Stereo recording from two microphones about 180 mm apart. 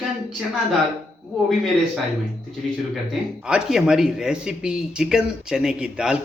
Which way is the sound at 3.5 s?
5° right (ahead or behind).